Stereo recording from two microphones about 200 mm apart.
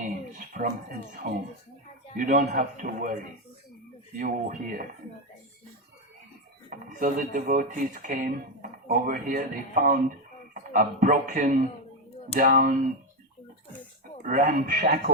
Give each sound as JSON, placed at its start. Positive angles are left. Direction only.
{"t": 0.3, "sound": "a sound", "side_deg": -45}
{"t": 1.2, "sound": "speech", "side_deg": -55}
{"t": 2.1, "sound": "speech", "side_deg": -45}
{"t": 4.2, "sound": "speech", "side_deg": -40}
{"t": 6.7, "sound": "speech", "side_deg": -40}
{"t": 14.3, "sound": "speech", "side_deg": -40}